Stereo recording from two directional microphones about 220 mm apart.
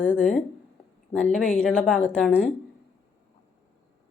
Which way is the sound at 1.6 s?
Centre (ahead or behind).